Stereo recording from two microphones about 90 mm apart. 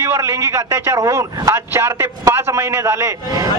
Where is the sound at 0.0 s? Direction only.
30° right (ahead or behind).